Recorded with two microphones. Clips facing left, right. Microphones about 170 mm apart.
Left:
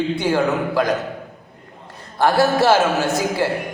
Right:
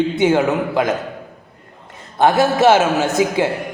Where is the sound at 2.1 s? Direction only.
20° right (ahead or behind).